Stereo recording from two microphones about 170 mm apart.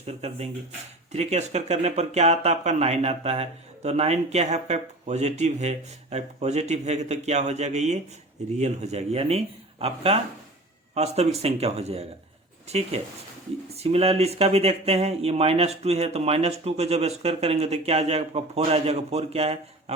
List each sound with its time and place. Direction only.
0.0 s speech: 40° right (ahead or behind)